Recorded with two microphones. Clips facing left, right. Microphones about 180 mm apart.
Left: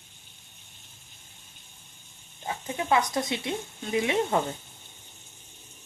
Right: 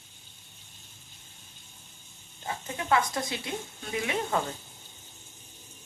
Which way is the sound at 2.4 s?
15° left (ahead or behind).